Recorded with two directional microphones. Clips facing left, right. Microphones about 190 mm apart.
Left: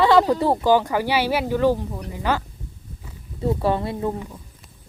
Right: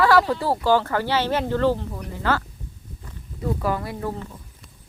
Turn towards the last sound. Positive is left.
turn(degrees=25)  # may be behind; listen again after turning